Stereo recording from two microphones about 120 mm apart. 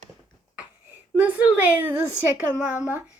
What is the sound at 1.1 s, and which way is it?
A woman's voice, 15° right (ahead or behind).